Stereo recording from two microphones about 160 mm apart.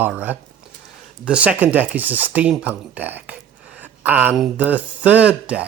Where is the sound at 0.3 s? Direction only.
10° right (ahead or behind).